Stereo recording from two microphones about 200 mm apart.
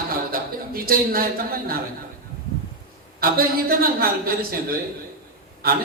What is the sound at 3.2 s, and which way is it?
A man's voice, 45° right (ahead or behind).